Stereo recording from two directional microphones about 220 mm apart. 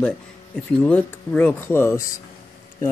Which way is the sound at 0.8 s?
5° left (ahead or behind).